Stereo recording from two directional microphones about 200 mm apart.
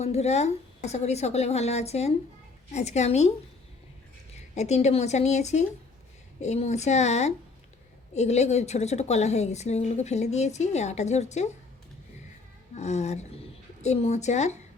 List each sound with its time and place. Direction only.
0.0 s a woman's voice: 30° left (ahead or behind)
4.5 s a woman's voice: 35° left (ahead or behind)
12.7 s a woman's voice: 35° left (ahead or behind)